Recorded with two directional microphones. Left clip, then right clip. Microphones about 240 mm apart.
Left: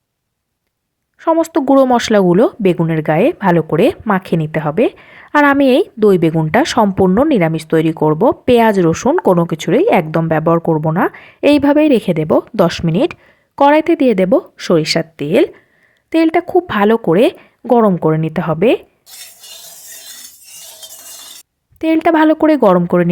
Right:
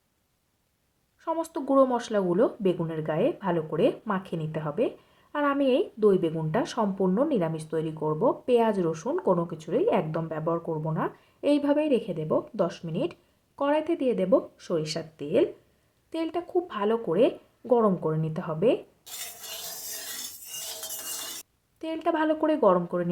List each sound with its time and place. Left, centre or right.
1.2 s speech: left
21.8 s speech: left